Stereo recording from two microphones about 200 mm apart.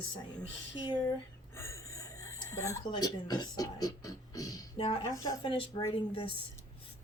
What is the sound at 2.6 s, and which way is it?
Speech, 15° left (ahead or behind).